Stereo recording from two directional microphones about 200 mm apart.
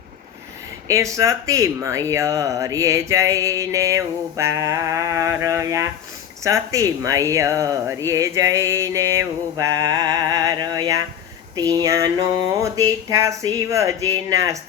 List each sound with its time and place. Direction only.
0.9 s speech: 15° right (ahead or behind)